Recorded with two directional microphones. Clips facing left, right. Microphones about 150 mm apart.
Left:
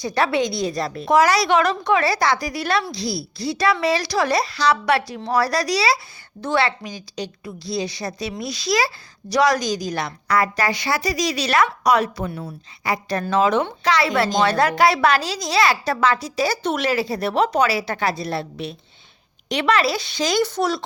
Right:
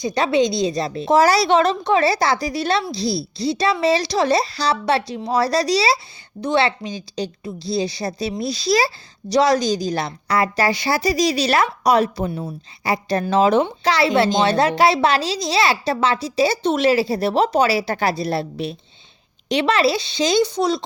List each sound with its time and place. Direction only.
0.0 s a woman's voice: 20° right (ahead or behind)